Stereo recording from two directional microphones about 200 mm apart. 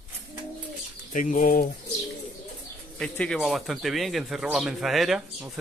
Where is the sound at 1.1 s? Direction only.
40° left (ahead or behind).